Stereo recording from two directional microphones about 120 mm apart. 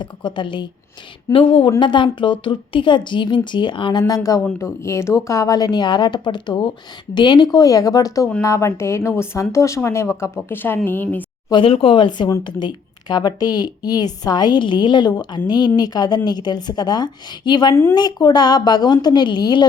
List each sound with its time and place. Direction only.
0.0 s a woman's voice: 40° left (ahead or behind); by 11.3 s 15° left (ahead or behind)
11.6 s speech: 50° left (ahead or behind)